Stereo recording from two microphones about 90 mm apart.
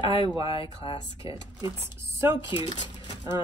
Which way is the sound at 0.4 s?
50° right (ahead or behind).